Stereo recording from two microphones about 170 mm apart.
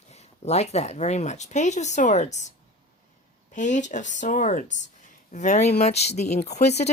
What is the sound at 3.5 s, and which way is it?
Speech, 45° left (ahead or behind).